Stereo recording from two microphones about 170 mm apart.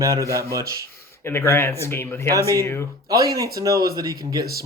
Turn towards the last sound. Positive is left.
turn(degrees=-25)  # may be behind; listen again after turning